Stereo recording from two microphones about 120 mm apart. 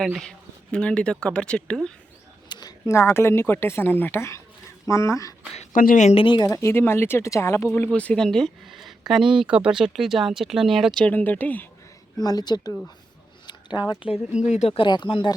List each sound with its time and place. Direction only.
0.0 s speech: centre (ahead or behind)
2.5 s a sound: 35° left (ahead or behind)
2.8 s speech: 20° left (ahead or behind)
5.5 s a woman's voice: 80° left
6.1 s speech: 40° left (ahead or behind)
6.5 s speech: 25° left (ahead or behind)
7.9 s speech: 10° left (ahead or behind)
11.0 s speech: 15° left (ahead or behind)
12.2 s speech: 35° left (ahead or behind)
14.4 s speech: 80° left
14.7 s speech: 45° left (ahead or behind)